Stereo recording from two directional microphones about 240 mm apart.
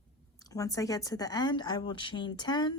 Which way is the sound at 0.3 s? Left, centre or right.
Centre.